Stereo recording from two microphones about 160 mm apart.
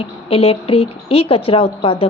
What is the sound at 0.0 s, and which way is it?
A woman's voice, 35° left (ahead or behind).